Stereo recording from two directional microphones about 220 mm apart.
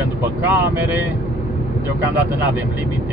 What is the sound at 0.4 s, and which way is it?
Speech, 10° right (ahead or behind).